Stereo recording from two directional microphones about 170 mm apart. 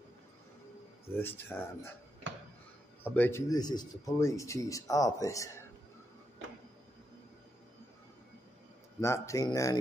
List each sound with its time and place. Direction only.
1.0 s speech: 10° left (ahead or behind)
3.0 s speech: 10° left (ahead or behind)
9.0 s speech: 15° left (ahead or behind)